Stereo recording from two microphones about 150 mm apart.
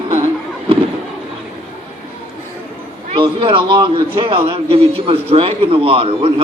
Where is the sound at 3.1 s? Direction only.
35° right (ahead or behind).